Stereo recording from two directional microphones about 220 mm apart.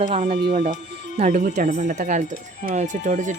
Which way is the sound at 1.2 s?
40° right (ahead or behind).